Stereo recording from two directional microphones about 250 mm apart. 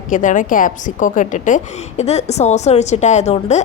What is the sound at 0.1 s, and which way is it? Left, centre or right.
A woman's voice, left.